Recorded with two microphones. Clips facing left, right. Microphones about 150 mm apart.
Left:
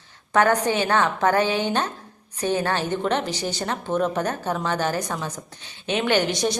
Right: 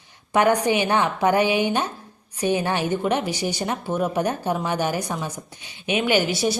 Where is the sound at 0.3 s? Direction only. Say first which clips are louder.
Right 1 dB; 10° right (ahead or behind).